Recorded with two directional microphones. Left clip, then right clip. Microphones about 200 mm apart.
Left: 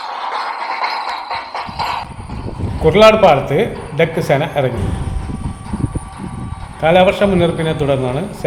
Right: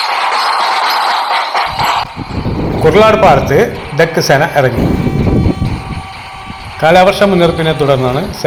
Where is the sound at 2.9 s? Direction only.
10° right (ahead or behind).